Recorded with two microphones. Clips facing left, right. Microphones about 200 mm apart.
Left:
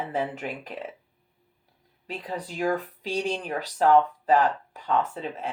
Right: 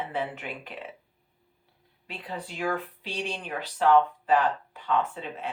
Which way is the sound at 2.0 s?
40° left (ahead or behind).